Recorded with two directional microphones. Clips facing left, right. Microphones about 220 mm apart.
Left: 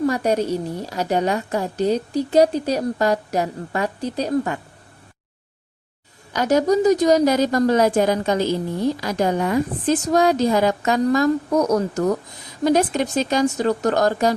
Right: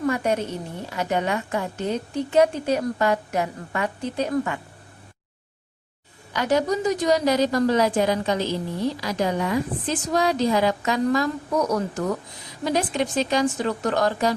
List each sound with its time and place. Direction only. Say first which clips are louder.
0.0 s a woman's voice: left 4 dB; 35° left (ahead or behind)
6.3 s a woman's voice: left 5 dB; 45° left (ahead or behind)